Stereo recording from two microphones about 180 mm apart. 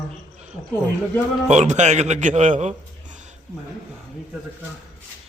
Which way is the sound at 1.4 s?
40° right (ahead or behind).